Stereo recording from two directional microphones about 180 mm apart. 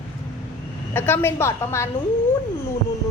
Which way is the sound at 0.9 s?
10° left (ahead or behind).